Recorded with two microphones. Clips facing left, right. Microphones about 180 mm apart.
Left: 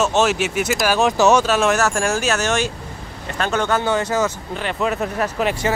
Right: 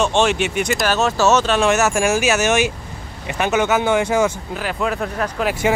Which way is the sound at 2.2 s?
5° right (ahead or behind).